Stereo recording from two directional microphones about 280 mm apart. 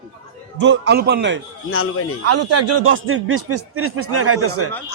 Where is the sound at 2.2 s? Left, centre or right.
Right.